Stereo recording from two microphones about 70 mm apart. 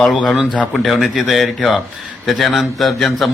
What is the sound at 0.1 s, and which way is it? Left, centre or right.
A man's voice, centre.